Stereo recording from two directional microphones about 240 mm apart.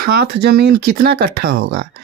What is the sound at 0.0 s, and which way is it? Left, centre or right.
Speech, right.